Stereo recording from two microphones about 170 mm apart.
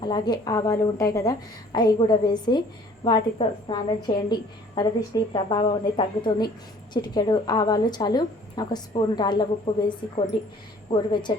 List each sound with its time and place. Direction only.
0.0 s a woman's voice: 25° left (ahead or behind)